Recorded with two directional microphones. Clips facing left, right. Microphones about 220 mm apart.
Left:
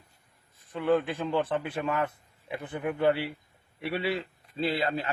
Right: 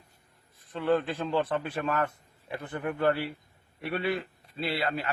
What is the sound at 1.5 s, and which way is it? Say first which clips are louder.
A man's voice: even; 10° left (ahead or behind).